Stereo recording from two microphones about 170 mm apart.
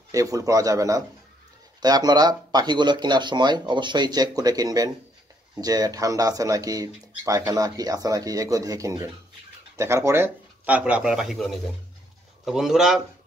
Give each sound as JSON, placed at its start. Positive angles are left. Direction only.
{"t": 0.1, "sound": "speech", "side_deg": -20}